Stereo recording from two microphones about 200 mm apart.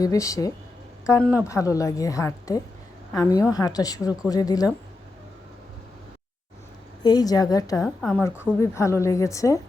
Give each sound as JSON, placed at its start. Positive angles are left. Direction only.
{"t": 0.0, "sound": "a woman's voice", "side_deg": 15}
{"t": 7.0, "sound": "speech", "side_deg": 20}
{"t": 7.8, "sound": "a woman's voice", "side_deg": 0}
{"t": 8.6, "sound": "a woman's voice", "side_deg": 15}